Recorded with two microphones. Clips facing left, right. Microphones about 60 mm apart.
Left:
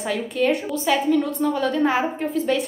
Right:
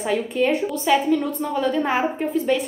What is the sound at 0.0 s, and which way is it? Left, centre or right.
A woman's voice, centre.